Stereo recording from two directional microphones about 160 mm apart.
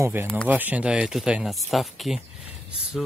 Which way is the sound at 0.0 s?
20° right (ahead or behind).